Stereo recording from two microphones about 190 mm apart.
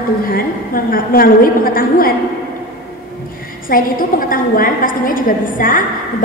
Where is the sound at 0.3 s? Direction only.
50° left (ahead or behind).